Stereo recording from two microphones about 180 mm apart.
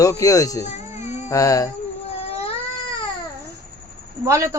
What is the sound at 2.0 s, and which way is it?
Cat, 35° left (ahead or behind).